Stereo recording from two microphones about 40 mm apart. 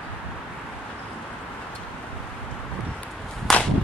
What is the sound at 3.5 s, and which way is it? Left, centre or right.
Whip, centre.